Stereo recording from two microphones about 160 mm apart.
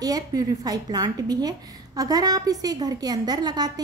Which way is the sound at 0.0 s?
25° right (ahead or behind).